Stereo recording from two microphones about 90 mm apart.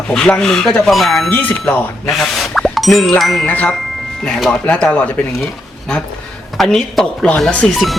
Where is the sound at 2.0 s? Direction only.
Centre (ahead or behind).